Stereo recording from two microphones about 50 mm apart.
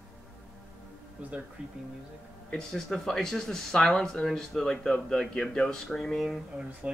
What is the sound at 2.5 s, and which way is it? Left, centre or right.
Speech, centre.